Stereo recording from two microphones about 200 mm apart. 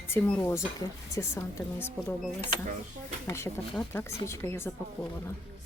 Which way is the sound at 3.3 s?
10° left (ahead or behind).